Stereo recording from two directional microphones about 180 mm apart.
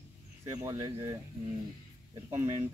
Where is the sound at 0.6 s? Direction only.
20° right (ahead or behind).